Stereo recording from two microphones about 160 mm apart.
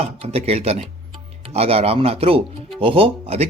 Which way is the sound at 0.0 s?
40° right (ahead or behind).